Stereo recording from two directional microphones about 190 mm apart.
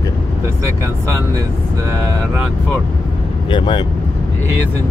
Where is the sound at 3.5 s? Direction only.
25° left (ahead or behind).